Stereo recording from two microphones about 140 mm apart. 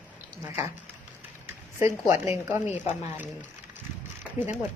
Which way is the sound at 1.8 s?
15° right (ahead or behind).